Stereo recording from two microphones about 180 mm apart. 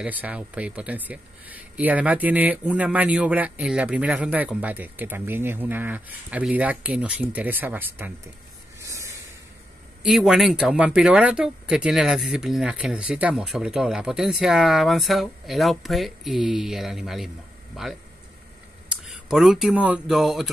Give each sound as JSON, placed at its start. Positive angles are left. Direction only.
{"t": 0.0, "sound": "speech", "side_deg": -10}
{"t": 8.7, "sound": "a sound", "side_deg": -15}
{"t": 10.0, "sound": "speech", "side_deg": 0}